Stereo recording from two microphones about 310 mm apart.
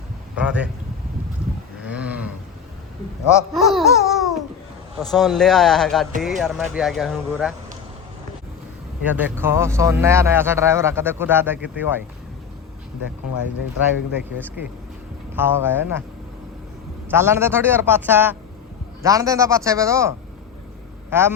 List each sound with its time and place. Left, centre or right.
0.3 s speech: centre
1.8 s a sound: centre
3.5 s babbling: centre
4.9 s speech: centre
9.0 s speech: centre
14.3 s speech: centre
17.1 s a woman's voice: centre